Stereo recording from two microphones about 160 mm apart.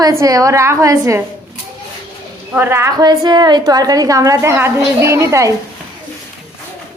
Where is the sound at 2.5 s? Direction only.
15° right (ahead or behind).